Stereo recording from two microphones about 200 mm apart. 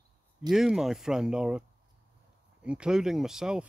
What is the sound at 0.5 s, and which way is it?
Speech, centre (ahead or behind).